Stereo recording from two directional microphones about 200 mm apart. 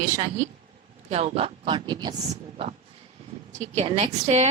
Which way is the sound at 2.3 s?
35° right (ahead or behind).